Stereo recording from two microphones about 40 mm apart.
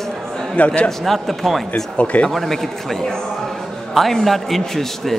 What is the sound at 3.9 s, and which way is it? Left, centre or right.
A man's voice, centre.